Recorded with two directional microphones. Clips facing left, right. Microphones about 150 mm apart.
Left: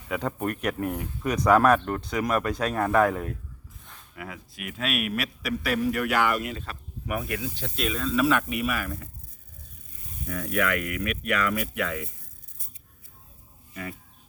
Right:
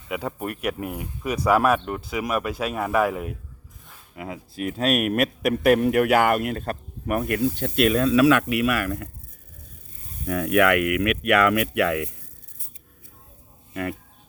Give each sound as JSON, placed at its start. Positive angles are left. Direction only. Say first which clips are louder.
{"t": 0.1, "sound": "speech", "louder": "even", "side_deg": -10}
{"t": 4.1, "sound": "speech", "louder": "right 5 dB", "side_deg": -25}
{"t": 10.2, "sound": "speech", "louder": "right 8 dB", "side_deg": -70}